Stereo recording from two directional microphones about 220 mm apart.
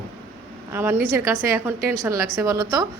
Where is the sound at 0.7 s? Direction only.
10° right (ahead or behind).